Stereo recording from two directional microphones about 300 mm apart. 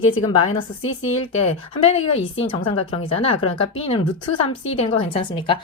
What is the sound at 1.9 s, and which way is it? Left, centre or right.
A woman's voice, centre.